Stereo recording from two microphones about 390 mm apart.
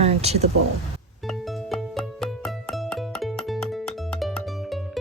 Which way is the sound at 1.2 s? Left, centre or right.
Centre.